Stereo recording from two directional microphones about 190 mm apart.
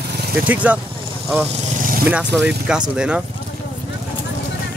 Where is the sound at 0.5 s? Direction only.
10° right (ahead or behind).